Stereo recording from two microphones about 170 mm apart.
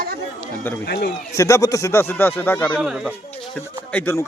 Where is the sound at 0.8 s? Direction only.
75° left (ahead or behind).